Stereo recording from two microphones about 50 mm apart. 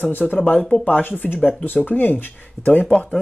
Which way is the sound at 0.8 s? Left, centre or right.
Left.